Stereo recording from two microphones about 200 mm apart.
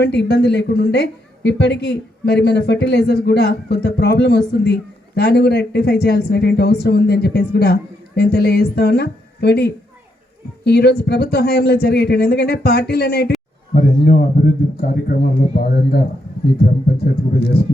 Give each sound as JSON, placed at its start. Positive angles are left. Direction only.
{"t": 0.0, "sound": "a woman's voice", "side_deg": 55}
{"t": 13.7, "sound": "a man's voice", "side_deg": 45}